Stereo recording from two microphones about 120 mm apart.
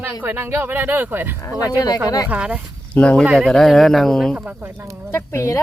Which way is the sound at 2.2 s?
10° right (ahead or behind).